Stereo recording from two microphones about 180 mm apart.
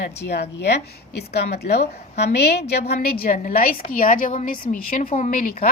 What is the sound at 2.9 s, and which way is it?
A woman's voice, 50° left (ahead or behind).